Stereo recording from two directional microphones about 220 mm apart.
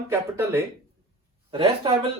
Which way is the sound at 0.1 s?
10° right (ahead or behind).